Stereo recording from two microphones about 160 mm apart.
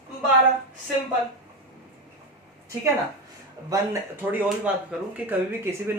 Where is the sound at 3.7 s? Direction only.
20° right (ahead or behind).